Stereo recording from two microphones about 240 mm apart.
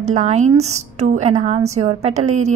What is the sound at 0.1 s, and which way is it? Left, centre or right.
A woman's voice, right.